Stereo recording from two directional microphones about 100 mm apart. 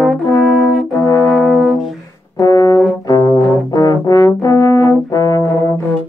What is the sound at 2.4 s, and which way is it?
Brass instrument, 35° left (ahead or behind).